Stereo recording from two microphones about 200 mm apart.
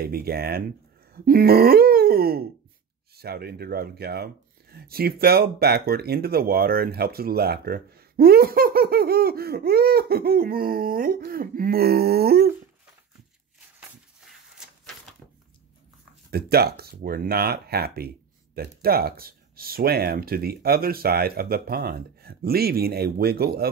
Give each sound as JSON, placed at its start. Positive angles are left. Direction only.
{"t": 0.0, "sound": "speech", "side_deg": -50}
{"t": 16.3, "sound": "speech", "side_deg": -50}